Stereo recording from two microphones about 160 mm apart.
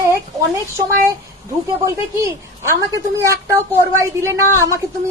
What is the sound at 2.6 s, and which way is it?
A woman's voice, 20° right (ahead or behind).